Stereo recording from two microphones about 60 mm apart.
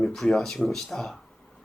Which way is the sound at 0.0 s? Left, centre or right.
Centre.